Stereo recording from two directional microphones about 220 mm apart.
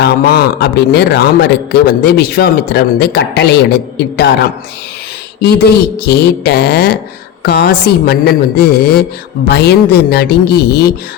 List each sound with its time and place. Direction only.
0.0 s a man's voice: 50° left (ahead or behind)
5.4 s a man's voice: 45° left (ahead or behind)